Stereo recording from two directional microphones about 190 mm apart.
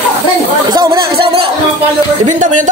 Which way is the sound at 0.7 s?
25° right (ahead or behind).